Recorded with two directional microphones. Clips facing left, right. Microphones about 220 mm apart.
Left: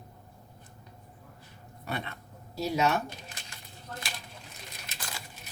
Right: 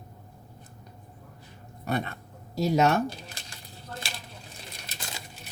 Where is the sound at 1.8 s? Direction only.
45° right (ahead or behind).